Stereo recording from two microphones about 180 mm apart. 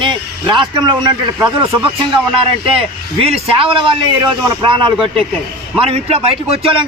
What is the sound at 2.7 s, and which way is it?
A man's voice, 30° right (ahead or behind).